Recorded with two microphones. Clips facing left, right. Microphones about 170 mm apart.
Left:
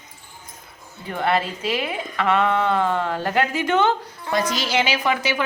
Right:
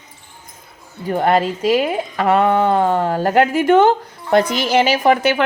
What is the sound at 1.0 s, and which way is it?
A woman's voice, 40° right (ahead or behind).